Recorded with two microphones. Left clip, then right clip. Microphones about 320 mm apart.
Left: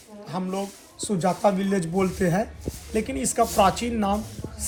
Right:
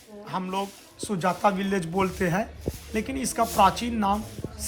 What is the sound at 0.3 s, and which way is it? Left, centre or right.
Speech, centre.